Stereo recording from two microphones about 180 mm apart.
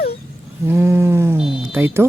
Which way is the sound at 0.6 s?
15° right (ahead or behind).